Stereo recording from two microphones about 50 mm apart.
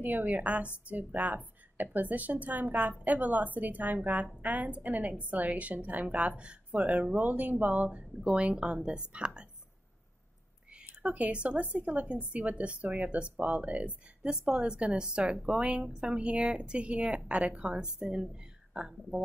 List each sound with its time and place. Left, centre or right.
0.0 s a woman's voice: right; by 9.5 s centre
10.7 s a woman's voice: right
14.2 s a woman's voice: centre